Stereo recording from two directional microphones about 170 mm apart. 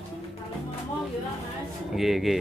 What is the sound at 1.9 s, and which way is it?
Speech, centre (ahead or behind).